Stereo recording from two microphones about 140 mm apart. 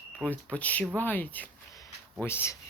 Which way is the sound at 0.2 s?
10° left (ahead or behind).